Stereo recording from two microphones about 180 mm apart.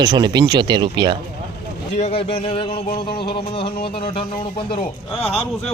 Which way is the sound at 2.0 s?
35° left (ahead or behind).